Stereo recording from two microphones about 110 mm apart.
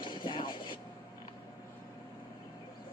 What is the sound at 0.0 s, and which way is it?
Vehicle, 50° left (ahead or behind).